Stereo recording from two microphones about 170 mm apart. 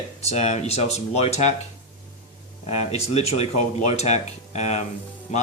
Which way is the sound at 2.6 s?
40° left (ahead or behind).